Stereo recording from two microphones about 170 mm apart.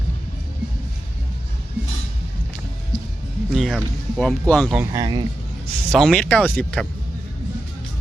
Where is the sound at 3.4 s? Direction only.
Centre (ahead or behind).